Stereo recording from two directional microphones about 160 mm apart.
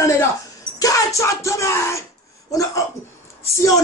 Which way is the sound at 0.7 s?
20° left (ahead or behind).